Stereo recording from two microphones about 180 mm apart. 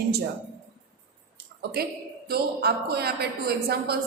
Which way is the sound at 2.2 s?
60° right (ahead or behind).